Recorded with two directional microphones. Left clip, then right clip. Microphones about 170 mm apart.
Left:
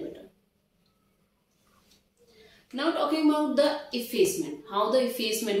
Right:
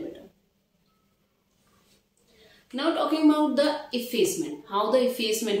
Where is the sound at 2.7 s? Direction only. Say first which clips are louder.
Right 1 dB; 15° right (ahead or behind).